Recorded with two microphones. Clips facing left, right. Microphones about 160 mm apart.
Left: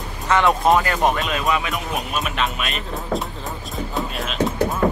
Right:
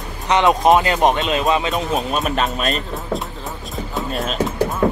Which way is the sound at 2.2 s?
40° right (ahead or behind).